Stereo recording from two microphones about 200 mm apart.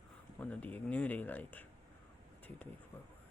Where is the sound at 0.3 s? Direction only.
10° left (ahead or behind).